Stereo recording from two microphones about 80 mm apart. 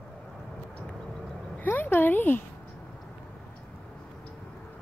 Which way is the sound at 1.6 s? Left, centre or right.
Left.